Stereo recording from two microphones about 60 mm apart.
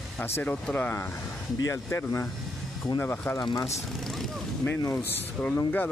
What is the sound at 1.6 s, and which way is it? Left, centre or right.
Speech, left.